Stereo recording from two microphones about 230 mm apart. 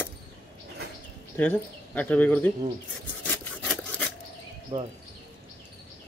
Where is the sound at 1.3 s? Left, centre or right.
Centre.